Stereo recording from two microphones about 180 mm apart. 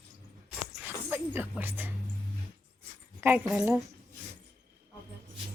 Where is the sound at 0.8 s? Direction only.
10° right (ahead or behind).